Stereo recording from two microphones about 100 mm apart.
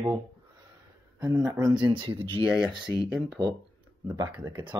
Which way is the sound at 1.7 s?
50° right (ahead or behind).